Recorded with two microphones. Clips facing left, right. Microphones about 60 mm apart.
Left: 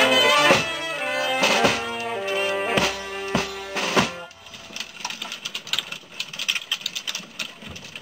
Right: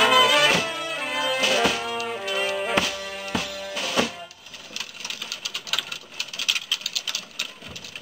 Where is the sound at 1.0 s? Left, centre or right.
Left.